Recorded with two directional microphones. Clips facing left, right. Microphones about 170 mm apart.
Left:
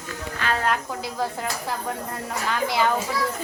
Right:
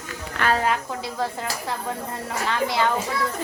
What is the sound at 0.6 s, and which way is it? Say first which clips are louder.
Speech: right 1 dB; centre (ahead or behind).